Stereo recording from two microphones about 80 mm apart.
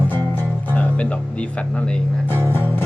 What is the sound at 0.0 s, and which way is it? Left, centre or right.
Music, left.